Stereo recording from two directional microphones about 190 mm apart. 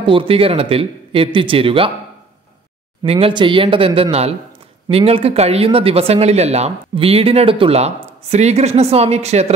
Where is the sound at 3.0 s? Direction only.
30° right (ahead or behind).